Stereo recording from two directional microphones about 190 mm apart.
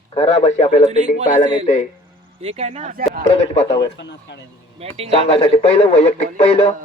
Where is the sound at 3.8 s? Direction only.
65° left (ahead or behind).